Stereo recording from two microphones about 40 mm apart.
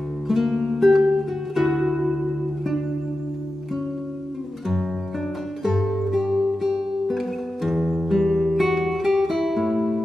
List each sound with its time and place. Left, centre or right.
0.3 s music: centre
5.6 s music: centre